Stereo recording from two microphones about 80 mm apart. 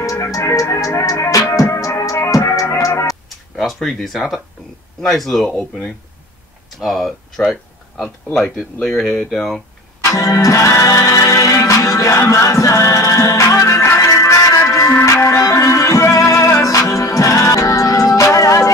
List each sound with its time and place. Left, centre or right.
0.0 s music: left
3.5 s speech: centre
10.1 s music: left